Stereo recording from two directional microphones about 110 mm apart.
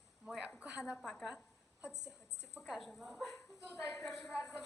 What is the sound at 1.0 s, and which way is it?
Speech, centre (ahead or behind).